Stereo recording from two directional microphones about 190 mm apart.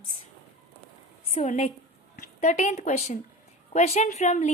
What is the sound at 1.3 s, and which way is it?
A woman's voice, 35° left (ahead or behind).